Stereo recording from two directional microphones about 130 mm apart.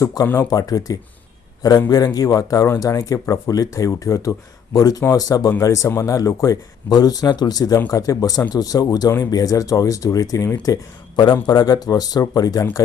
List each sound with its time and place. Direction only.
0.0 s speech: 30° left (ahead or behind)